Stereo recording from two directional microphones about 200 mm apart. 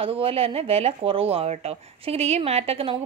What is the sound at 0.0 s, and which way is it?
A woman's voice, 30° right (ahead or behind).